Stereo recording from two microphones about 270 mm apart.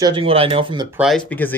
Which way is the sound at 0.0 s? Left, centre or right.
Centre.